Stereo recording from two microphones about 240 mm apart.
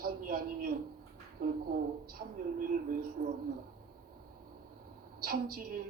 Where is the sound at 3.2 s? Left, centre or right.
Right.